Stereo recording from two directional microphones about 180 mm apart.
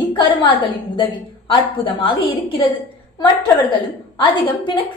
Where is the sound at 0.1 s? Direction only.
30° left (ahead or behind).